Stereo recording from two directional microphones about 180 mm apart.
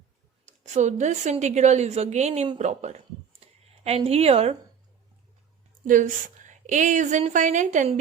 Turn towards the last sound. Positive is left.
turn(degrees=-45)  # may be behind; listen again after turning